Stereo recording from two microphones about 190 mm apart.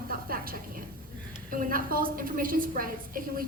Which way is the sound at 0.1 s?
50° right (ahead or behind).